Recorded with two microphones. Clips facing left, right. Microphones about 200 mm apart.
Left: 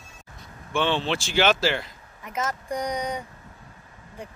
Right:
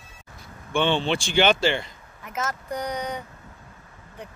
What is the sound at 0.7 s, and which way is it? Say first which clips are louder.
A man's voice: right 2 dB; centre (ahead or behind).